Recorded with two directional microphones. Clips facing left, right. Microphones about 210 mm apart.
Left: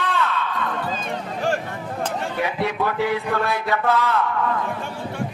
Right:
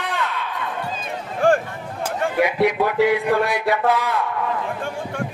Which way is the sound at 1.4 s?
50° right (ahead or behind).